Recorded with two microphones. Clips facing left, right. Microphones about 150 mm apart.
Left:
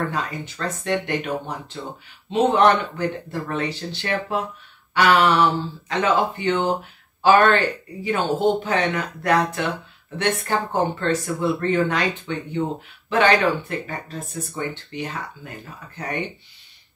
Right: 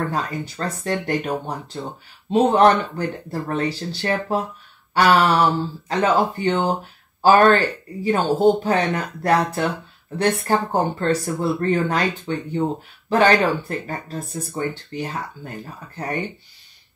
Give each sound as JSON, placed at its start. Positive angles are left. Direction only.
{"t": 0.1, "sound": "speech", "side_deg": -40}